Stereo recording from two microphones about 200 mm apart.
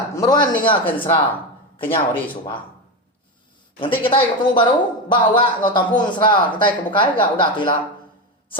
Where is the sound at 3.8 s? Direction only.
25° left (ahead or behind).